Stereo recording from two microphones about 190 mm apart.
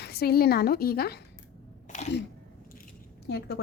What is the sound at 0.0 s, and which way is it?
A woman's voice, 55° left (ahead or behind).